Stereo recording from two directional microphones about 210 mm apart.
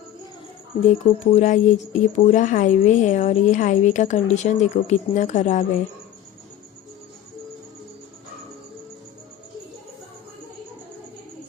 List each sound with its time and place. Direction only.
0.9 s speech: 35° left (ahead or behind)